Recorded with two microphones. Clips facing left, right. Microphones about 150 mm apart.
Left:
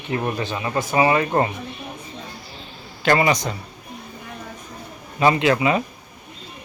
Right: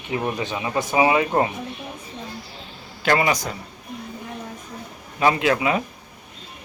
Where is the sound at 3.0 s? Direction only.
5° right (ahead or behind).